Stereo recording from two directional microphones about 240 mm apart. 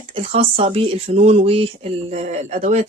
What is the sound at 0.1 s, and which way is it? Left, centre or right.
Speech, right.